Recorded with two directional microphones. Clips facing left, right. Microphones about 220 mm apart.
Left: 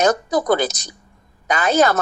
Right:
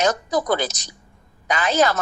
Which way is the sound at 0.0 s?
55° left (ahead or behind).